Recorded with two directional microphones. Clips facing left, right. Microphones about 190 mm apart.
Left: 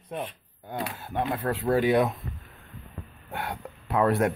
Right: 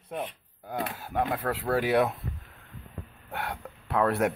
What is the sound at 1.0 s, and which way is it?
Speech, 10° right (ahead or behind).